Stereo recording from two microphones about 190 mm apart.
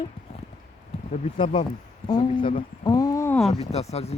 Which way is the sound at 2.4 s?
40° left (ahead or behind).